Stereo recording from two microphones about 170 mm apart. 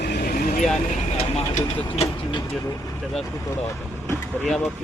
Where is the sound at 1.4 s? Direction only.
35° left (ahead or behind).